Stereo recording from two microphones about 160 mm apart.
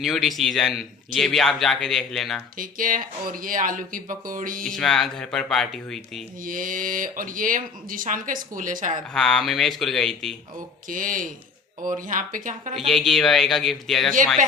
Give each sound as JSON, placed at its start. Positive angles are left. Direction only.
{"t": 0.0, "sound": "a man's voice", "side_deg": 0}
{"t": 2.6, "sound": "speech", "side_deg": -60}
{"t": 4.6, "sound": "a man's voice", "side_deg": 0}
{"t": 6.4, "sound": "speech", "side_deg": -60}
{"t": 9.1, "sound": "a man's voice", "side_deg": 0}
{"t": 10.8, "sound": "speech", "side_deg": -55}
{"t": 12.9, "sound": "a man's voice", "side_deg": 0}